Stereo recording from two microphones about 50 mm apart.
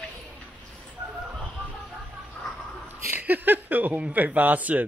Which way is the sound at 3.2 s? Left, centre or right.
Right.